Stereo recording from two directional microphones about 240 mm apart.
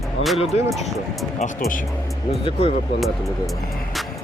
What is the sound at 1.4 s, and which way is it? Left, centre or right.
Speech, left.